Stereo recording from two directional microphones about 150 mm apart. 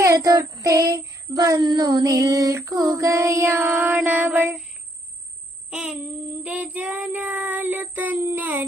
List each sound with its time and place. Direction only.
0.0 s child singing: 25° right (ahead or behind)
5.7 s child singing: 5° right (ahead or behind)